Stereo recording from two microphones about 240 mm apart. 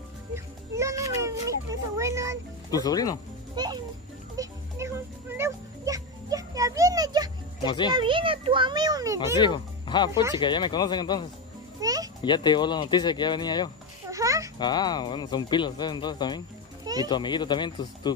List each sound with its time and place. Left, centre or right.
0.3 s a child's voice: centre
2.7 s speech: centre
3.5 s a child's voice: centre
4.4 s music: centre
7.6 s speech: centre
7.9 s a child's voice: right
9.4 s speech: centre
11.8 s music: centre
12.2 s speech: centre
14.1 s babbling: centre
14.6 s speech: centre
16.8 s children playing: centre
17.1 s speech: centre